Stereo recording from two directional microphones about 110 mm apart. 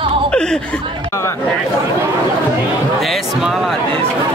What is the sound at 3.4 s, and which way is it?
Speech, 5° right (ahead or behind).